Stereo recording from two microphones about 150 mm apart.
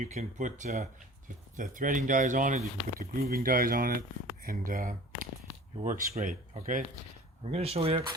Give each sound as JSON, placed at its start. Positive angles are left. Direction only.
{"t": 0.0, "sound": "speech", "side_deg": -50}
{"t": 7.4, "sound": "speech", "side_deg": -40}